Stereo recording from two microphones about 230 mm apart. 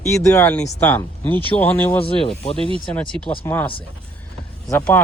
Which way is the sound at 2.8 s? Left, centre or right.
Centre.